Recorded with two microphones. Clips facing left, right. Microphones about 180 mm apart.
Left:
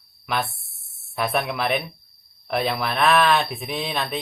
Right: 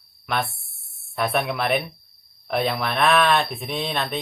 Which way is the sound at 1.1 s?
Centre (ahead or behind).